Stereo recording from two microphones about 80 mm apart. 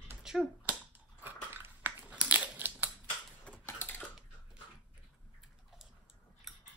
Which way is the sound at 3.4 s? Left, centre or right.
Left.